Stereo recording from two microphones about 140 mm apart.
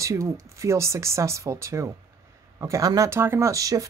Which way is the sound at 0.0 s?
20° right (ahead or behind).